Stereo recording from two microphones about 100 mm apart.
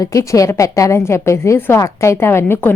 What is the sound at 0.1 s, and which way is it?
A woman's voice, 35° left (ahead or behind).